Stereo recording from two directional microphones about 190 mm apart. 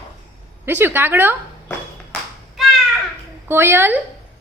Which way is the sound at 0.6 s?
10° right (ahead or behind).